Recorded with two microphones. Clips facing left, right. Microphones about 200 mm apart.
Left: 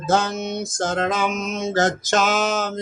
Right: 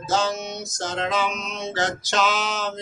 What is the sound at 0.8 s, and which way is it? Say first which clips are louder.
Music: left 3 dB; 50° left (ahead or behind).